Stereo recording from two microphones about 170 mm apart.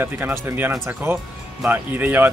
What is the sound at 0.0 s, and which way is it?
Speech, 15° right (ahead or behind).